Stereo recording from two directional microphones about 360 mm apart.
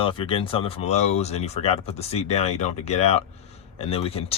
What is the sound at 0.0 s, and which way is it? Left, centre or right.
Speech, centre.